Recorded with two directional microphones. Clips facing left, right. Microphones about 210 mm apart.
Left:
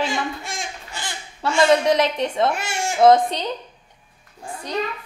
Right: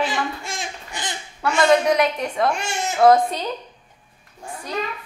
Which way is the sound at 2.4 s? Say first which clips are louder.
Right 2 dB; 5° left (ahead or behind).